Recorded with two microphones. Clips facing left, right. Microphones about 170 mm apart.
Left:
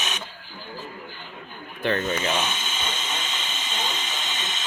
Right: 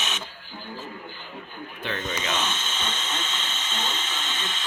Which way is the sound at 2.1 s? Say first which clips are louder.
Left 3 dB; 10° left (ahead or behind).